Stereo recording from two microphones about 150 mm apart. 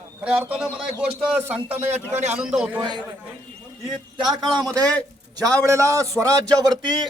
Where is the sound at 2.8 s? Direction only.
30° right (ahead or behind).